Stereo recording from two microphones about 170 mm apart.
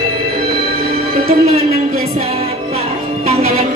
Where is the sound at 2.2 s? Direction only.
35° right (ahead or behind).